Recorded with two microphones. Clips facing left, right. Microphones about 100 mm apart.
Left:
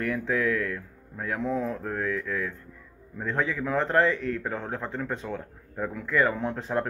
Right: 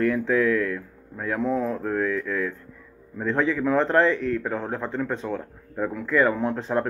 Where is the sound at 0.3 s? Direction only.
40° right (ahead or behind).